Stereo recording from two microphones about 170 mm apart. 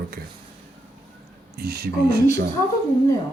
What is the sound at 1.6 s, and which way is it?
Speech, 65° right (ahead or behind).